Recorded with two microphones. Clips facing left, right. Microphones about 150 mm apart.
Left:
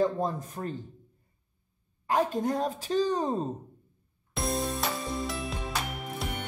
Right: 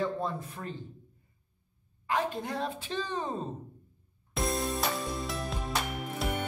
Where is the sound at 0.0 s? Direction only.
40° left (ahead or behind).